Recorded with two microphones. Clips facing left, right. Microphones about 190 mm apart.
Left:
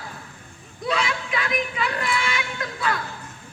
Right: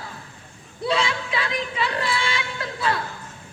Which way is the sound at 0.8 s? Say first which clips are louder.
Right 2 dB; 30° right (ahead or behind).